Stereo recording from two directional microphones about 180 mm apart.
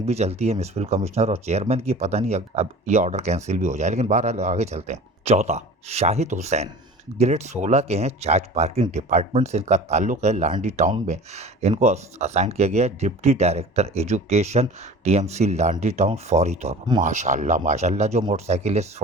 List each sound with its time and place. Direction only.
0.0 s speech: 35° right (ahead or behind)